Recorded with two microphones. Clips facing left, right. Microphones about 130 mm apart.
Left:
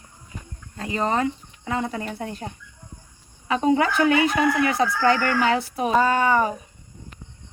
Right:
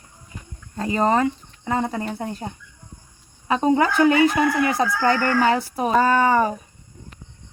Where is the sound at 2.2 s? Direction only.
30° right (ahead or behind).